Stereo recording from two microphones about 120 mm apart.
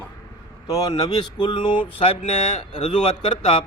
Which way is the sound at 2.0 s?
60° left (ahead or behind).